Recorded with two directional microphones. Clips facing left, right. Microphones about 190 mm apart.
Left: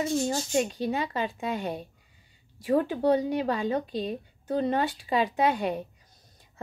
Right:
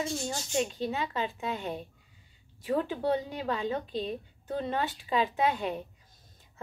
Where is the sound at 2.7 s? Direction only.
40° left (ahead or behind).